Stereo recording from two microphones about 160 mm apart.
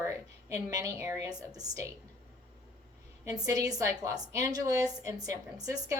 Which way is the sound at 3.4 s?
20° right (ahead or behind).